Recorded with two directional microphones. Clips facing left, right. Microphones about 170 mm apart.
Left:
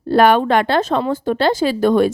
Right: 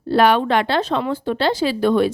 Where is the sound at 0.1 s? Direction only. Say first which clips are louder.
Left 3 dB; 50° left (ahead or behind).